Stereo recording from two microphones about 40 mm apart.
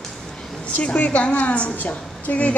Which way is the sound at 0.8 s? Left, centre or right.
Left.